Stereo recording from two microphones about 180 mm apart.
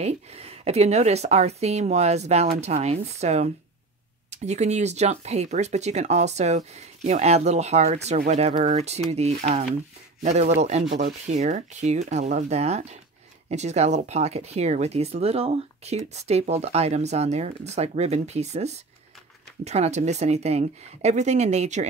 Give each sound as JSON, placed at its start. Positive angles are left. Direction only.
{"t": 0.0, "sound": "speech", "side_deg": -35}